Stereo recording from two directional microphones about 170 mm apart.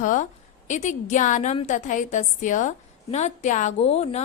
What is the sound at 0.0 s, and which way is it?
A woman's voice, 50° left (ahead or behind).